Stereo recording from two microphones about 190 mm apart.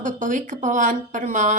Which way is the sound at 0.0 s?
40° right (ahead or behind).